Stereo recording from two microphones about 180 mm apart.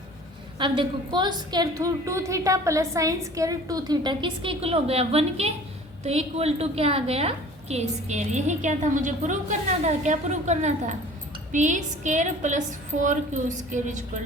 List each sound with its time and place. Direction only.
0.6 s a woman's voice: 25° right (ahead or behind); by 13.9 s 45° right (ahead or behind)